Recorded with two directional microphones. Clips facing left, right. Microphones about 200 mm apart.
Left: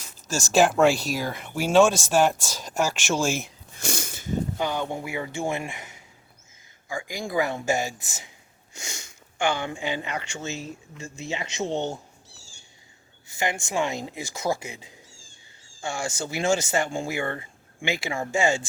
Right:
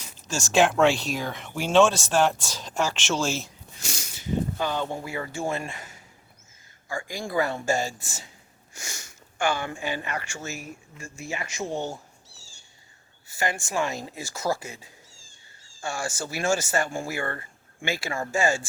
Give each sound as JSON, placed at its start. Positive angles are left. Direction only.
{"t": 0.5, "sound": "speech", "side_deg": 5}
{"t": 3.8, "sound": "a sound", "side_deg": 55}
{"t": 4.5, "sound": "speech", "side_deg": 15}
{"t": 13.2, "sound": "speech", "side_deg": 20}